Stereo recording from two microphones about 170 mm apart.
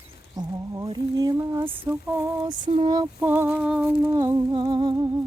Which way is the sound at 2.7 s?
35° right (ahead or behind).